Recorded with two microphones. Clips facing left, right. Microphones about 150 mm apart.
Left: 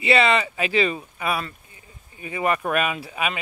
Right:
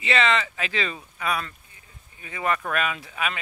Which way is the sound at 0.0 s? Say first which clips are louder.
Left 4 dB; 10° left (ahead or behind).